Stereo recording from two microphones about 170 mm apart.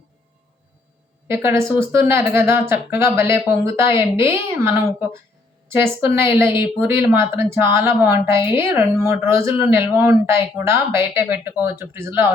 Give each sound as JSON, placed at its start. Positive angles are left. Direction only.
{"t": 1.3, "sound": "speech", "side_deg": -15}